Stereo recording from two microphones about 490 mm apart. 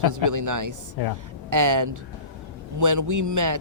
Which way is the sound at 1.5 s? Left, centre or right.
Right.